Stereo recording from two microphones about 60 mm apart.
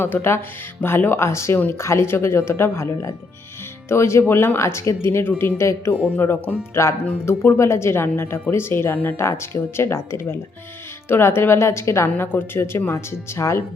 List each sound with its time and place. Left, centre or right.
0.0 s a woman's voice: left
5.2 s a woman's voice: left
6.0 s speech: left
7.3 s a woman's voice: left
12.2 s a woman's voice: left